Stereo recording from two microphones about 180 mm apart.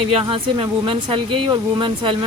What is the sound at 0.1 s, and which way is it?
Speech, 30° right (ahead or behind).